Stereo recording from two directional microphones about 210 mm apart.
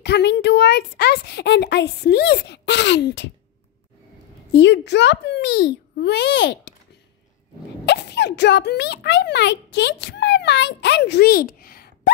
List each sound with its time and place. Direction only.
0.0 s a child's voice: 55° left (ahead or behind)
4.5 s a child's voice: 55° left (ahead or behind)
7.8 s a child's voice: 55° left (ahead or behind)